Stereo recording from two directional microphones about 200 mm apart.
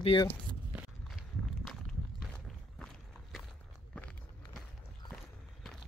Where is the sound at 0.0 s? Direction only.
25° left (ahead or behind).